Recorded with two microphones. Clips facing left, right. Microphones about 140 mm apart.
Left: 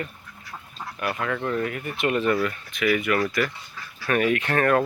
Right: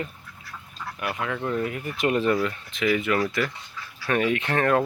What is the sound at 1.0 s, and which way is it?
Speech, 10° right (ahead or behind).